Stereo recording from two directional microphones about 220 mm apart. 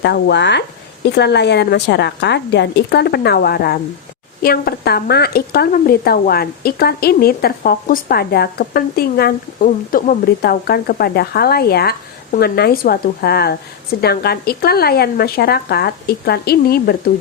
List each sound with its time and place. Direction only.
0.0 s speech: 50° left (ahead or behind)